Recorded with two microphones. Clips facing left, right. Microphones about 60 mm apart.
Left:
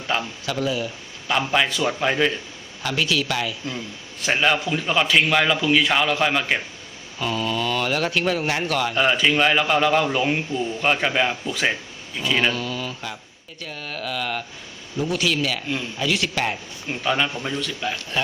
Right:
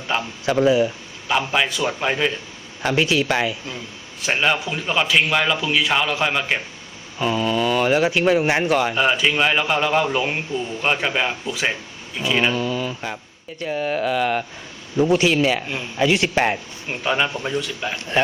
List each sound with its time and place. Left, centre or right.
0.1 s a man's voice: centre
0.4 s speech: right
1.3 s a man's voice: centre
2.8 s speech: right
4.3 s a man's voice: centre
7.2 s speech: centre
9.0 s a man's voice: centre; by 16.6 s right
17.0 s speech: centre